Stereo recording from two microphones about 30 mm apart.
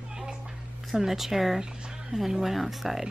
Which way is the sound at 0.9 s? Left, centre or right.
Centre.